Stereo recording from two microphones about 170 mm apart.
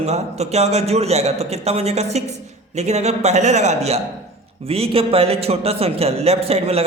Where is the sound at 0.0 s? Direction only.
40° right (ahead or behind).